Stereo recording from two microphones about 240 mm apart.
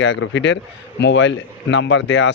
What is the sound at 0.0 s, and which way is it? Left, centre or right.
Speech, left.